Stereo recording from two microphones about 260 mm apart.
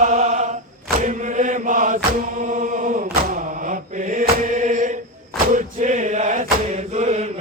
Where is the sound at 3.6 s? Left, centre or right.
Right.